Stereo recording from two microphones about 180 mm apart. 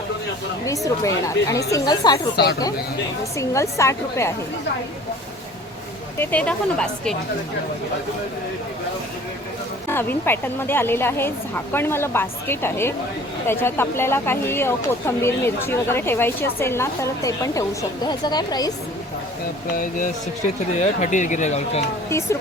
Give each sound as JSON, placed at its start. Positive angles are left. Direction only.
{"t": 0.9, "sound": "speech", "side_deg": 15}
{"t": 2.3, "sound": "speech", "side_deg": 65}
{"t": 3.3, "sound": "speech", "side_deg": 15}
{"t": 6.1, "sound": "speech", "side_deg": 5}
{"t": 9.9, "sound": "speech", "side_deg": 10}
{"t": 19.7, "sound": "speech", "side_deg": 50}